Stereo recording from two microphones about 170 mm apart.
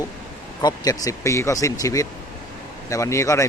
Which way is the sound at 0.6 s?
20° left (ahead or behind).